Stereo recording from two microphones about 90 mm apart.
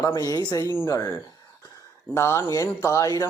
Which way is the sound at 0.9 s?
40° left (ahead or behind).